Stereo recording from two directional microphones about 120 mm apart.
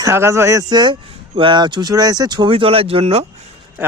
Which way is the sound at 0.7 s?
40° right (ahead or behind).